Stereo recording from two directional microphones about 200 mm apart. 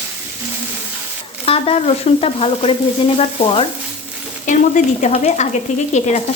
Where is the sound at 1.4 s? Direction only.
30° left (ahead or behind).